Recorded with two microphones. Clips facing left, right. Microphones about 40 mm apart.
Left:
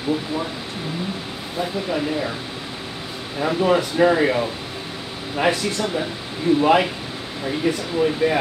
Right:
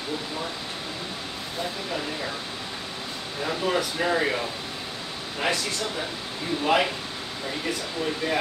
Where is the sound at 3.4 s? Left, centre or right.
Centre.